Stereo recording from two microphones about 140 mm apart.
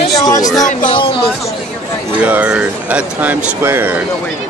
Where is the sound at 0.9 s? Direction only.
35° left (ahead or behind).